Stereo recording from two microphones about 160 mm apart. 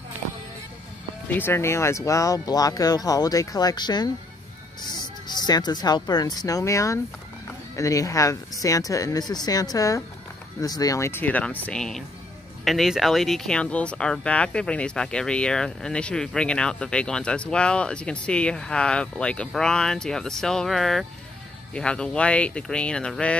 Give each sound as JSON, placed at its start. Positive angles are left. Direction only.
{"t": 1.3, "sound": "speech", "side_deg": 15}